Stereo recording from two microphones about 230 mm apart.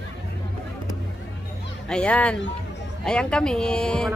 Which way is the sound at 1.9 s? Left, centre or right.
Centre.